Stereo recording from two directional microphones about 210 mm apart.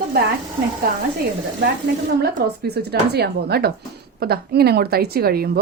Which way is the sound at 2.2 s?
50° right (ahead or behind).